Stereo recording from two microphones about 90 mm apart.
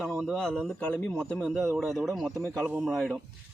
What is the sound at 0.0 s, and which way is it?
A man's voice, 5° left (ahead or behind).